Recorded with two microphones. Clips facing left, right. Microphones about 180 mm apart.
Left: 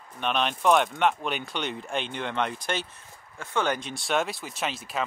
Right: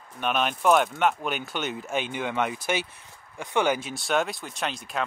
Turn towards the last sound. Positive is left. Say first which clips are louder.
# even
turn(degrees=0)  # may be behind; listen again after turning